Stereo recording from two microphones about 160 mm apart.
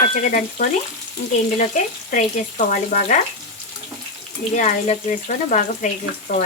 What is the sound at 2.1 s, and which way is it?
Speech, 50° left (ahead or behind).